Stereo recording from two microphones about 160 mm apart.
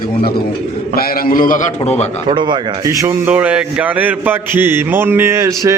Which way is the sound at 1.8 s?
45° left (ahead or behind).